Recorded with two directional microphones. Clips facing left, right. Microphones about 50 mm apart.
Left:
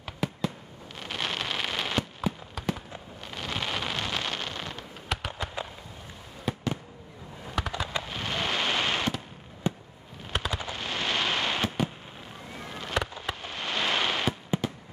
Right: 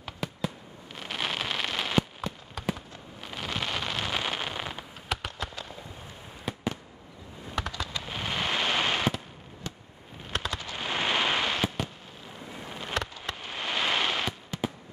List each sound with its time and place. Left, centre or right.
0.0 s fireworks: centre
3.3 s a sound: centre
5.1 s fireworks: centre
7.5 s a sound: centre
8.0 s fireworks: centre
9.6 s fireworks: left
10.3 s fireworks: centre
10.8 s fireworks: centre
11.4 s fireworks: centre
12.6 s skateboard: centre
13.2 s fireworks: centre
14.6 s fireworks: centre